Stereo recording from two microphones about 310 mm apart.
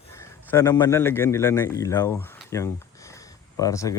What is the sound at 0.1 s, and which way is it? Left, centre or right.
A man's voice, centre.